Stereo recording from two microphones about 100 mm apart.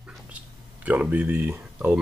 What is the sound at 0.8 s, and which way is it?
Speech, 15° right (ahead or behind).